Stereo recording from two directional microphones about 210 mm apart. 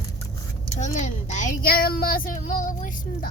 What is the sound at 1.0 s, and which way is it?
Speech, 35° left (ahead or behind).